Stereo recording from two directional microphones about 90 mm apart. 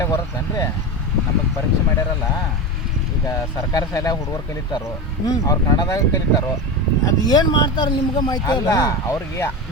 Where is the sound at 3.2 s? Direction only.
40° left (ahead or behind).